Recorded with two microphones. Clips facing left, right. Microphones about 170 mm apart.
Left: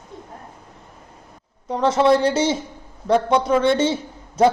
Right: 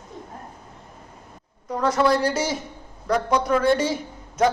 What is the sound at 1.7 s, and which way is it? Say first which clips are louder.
A man's voice: left 4 dB; 25° left (ahead or behind).